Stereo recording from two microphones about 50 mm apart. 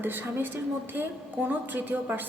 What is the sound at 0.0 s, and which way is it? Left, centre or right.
A woman's voice, right.